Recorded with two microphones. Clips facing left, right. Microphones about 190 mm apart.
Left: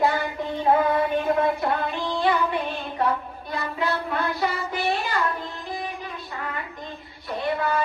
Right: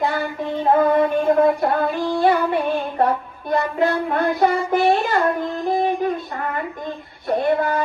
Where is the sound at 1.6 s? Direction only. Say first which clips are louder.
Right 6 dB; 55° right (ahead or behind).